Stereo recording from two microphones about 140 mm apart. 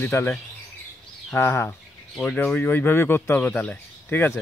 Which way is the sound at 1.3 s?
15° left (ahead or behind).